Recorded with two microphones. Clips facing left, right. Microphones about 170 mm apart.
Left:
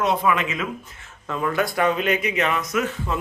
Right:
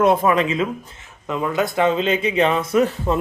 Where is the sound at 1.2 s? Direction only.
20° right (ahead or behind); by 3.2 s 35° right (ahead or behind).